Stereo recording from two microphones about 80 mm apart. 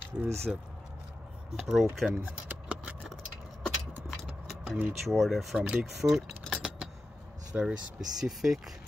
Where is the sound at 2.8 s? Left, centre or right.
Centre.